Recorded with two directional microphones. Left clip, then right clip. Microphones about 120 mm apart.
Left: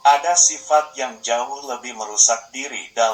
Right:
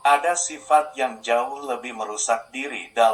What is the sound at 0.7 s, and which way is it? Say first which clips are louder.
Speech: left 1 dB; 55° right (ahead or behind).